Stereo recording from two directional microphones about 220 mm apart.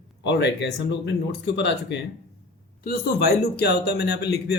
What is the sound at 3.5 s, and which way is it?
Speech, 45° left (ahead or behind).